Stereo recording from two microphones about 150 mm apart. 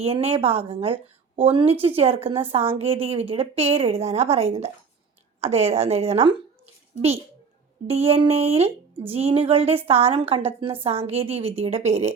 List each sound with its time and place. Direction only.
0.0 s a woman's voice: 40° right (ahead or behind)
7.9 s a woman's voice: 40° right (ahead or behind)